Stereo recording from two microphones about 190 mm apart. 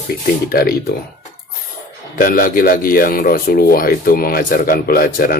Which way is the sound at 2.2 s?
45° left (ahead or behind).